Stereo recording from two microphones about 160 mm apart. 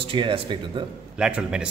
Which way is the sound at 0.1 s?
30° right (ahead or behind).